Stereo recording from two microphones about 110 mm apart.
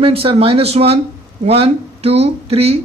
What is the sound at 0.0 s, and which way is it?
Speech, 55° right (ahead or behind).